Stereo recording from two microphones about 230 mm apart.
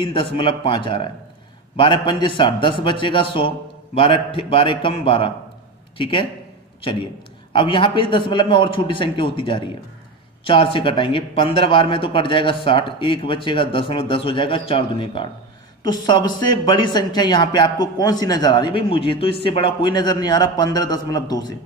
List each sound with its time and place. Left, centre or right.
0.0 s a man's voice: left
7.5 s a man's voice: left